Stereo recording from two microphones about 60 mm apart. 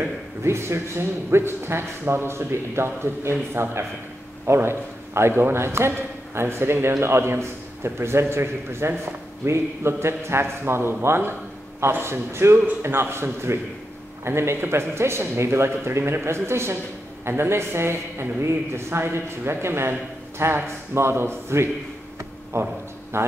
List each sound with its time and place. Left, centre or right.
0.4 s a man's voice: right